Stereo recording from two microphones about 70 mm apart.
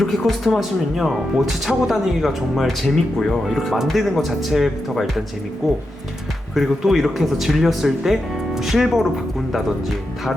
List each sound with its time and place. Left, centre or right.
0.0 s speech: centre